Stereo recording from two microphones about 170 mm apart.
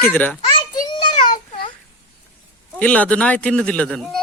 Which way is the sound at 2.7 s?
10° left (ahead or behind).